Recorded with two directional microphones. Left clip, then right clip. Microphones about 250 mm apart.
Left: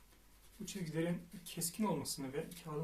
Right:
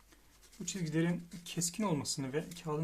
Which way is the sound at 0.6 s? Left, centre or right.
Right.